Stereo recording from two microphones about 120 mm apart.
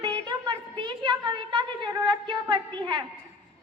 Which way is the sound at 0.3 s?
40° right (ahead or behind).